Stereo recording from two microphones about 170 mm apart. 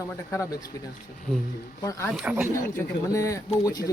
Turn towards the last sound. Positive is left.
turn(degrees=20)  # may be behind; listen again after turning